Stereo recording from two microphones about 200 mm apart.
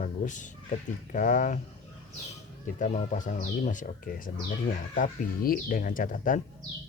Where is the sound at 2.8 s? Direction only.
35° left (ahead or behind).